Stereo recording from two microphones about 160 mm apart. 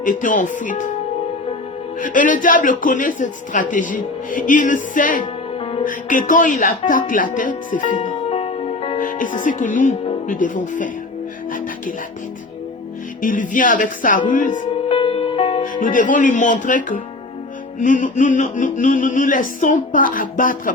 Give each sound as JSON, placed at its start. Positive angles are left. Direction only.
{"t": 0.0, "sound": "speech", "side_deg": 55}
{"t": 2.0, "sound": "speech", "side_deg": 55}
{"t": 5.2, "sound": "music", "side_deg": 35}
{"t": 5.8, "sound": "speech", "side_deg": 55}
{"t": 8.3, "sound": "music", "side_deg": 40}
{"t": 9.0, "sound": "speech", "side_deg": 60}
{"t": 13.2, "sound": "speech", "side_deg": 55}
{"t": 14.8, "sound": "music", "side_deg": 35}
{"t": 15.6, "sound": "speech", "side_deg": 60}